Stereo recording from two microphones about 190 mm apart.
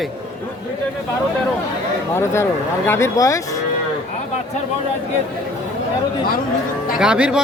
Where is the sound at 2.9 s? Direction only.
15° left (ahead or behind).